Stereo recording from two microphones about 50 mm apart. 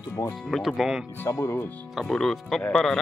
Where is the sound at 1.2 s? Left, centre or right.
Left.